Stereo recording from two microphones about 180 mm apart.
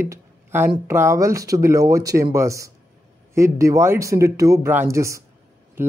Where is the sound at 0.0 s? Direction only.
15° right (ahead or behind).